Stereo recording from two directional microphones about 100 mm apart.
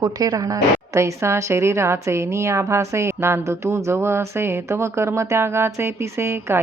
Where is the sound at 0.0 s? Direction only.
40° right (ahead or behind).